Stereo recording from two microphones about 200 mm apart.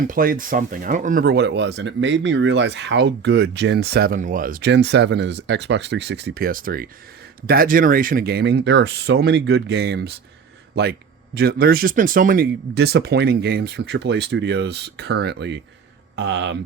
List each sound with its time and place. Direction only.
0.1 s speech: 45° right (ahead or behind)
11.3 s speech: 50° right (ahead or behind)